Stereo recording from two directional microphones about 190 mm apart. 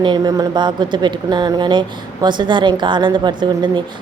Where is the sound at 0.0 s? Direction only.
20° right (ahead or behind).